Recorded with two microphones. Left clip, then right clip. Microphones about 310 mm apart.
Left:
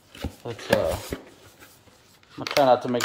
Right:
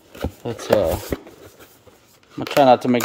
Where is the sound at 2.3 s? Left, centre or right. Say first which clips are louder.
Right 5 dB; right.